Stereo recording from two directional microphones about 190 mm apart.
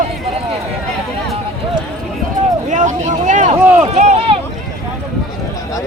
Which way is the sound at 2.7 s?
40° right (ahead or behind).